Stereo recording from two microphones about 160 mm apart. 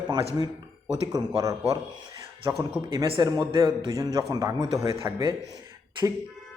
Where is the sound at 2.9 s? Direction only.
30° right (ahead or behind).